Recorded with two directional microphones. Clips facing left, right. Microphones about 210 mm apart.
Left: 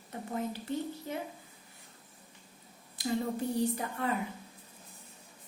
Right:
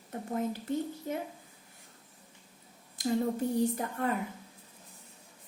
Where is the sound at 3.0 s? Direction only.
50° right (ahead or behind).